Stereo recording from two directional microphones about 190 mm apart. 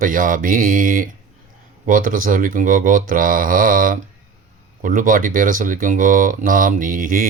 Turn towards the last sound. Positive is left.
turn(degrees=-45)  # may be behind; listen again after turning